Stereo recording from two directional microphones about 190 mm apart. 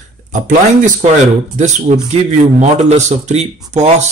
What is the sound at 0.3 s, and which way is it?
Speech, 40° right (ahead or behind).